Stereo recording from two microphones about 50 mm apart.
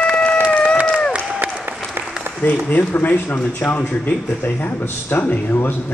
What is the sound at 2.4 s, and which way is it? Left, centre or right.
Speech, left.